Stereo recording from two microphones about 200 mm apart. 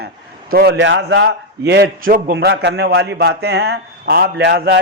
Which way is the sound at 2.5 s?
60° right (ahead or behind).